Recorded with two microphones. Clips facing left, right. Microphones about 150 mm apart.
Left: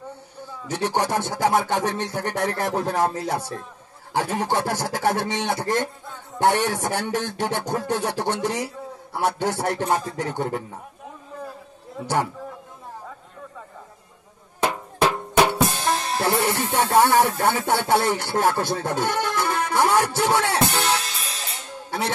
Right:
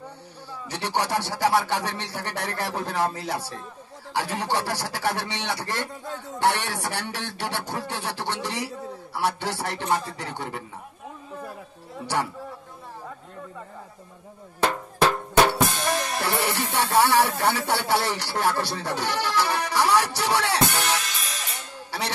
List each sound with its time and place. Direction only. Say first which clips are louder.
0.7 s speech: left 4 dB; 50° left (ahead or behind)
14.6 s drum: left 1 dB; 15° left (ahead or behind)
15.7 s music: left 2 dB; 30° left (ahead or behind)
16.7 s speech: left 3 dB; 45° left (ahead or behind)
20.8 s music: left 3 dB; 30° left (ahead or behind)